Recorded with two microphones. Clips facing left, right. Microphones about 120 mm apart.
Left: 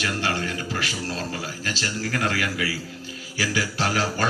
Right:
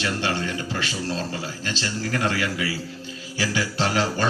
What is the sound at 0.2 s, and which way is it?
Speech, 25° right (ahead or behind).